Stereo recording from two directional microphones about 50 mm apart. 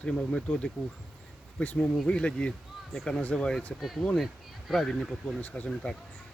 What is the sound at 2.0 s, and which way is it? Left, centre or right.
Speech, left.